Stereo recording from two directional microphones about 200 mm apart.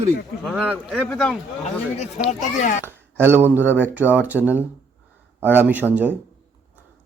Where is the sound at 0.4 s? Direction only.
5° right (ahead or behind).